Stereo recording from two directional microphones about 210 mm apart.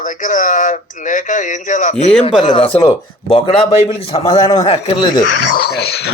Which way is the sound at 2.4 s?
25° left (ahead or behind).